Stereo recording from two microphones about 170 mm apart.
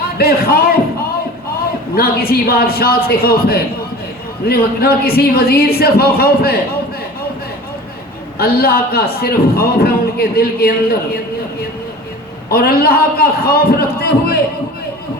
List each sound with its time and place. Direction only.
0.2 s a man's voice: 65° left (ahead or behind)
2.0 s a man's voice: 65° left (ahead or behind)
8.4 s a man's voice: 65° left (ahead or behind)
12.5 s a man's voice: 65° left (ahead or behind)